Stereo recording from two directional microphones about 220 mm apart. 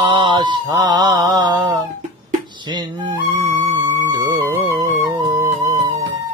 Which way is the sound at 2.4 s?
20° right (ahead or behind).